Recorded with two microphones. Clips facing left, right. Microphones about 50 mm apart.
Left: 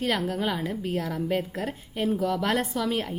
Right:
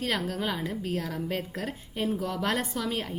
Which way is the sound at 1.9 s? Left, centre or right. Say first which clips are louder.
Left 4 dB; centre.